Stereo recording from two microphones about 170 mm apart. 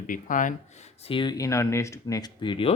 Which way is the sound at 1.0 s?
30° left (ahead or behind).